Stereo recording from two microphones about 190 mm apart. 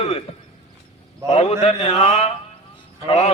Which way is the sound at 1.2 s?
30° left (ahead or behind).